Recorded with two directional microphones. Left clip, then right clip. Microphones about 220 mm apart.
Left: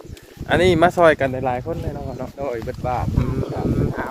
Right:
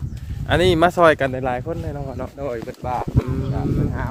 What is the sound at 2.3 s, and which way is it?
Speech, 50° right (ahead or behind).